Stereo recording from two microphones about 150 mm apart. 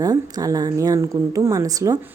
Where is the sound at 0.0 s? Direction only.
25° right (ahead or behind).